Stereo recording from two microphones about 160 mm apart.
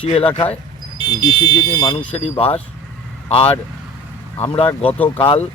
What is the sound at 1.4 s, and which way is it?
Speech, 25° left (ahead or behind).